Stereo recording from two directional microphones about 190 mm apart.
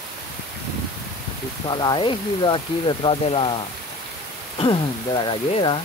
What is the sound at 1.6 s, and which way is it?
Speech, 25° left (ahead or behind).